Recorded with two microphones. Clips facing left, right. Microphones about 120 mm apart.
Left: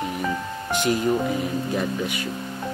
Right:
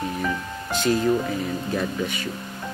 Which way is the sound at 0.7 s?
20° left (ahead or behind).